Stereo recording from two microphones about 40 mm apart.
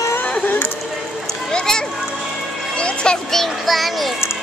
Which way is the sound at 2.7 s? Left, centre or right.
Left.